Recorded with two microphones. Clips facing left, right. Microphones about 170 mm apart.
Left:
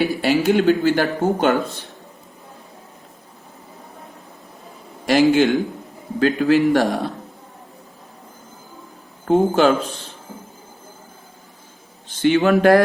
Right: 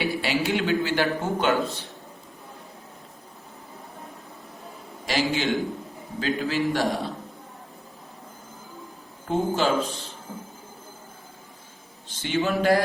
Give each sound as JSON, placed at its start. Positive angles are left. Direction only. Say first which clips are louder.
{"t": 0.0, "sound": "speech", "louder": "left 7 dB", "side_deg": 45}
{"t": 5.0, "sound": "a man's voice", "louder": "left 10 dB", "side_deg": 55}
{"t": 9.2, "sound": "a man's voice", "louder": "left 8 dB", "side_deg": 60}
{"t": 12.0, "sound": "a man's voice", "louder": "left 10 dB", "side_deg": 65}